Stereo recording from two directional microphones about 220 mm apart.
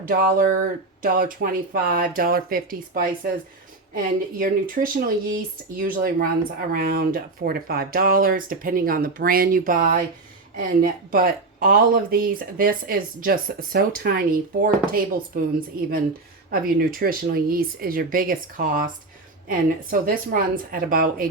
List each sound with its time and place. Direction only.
1.0 s speech: 40° right (ahead or behind)
16.5 s speech: 40° right (ahead or behind)